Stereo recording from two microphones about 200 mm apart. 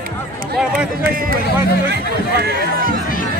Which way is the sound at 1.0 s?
45° right (ahead or behind).